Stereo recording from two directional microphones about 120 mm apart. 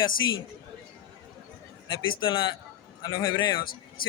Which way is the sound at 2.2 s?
40° left (ahead or behind).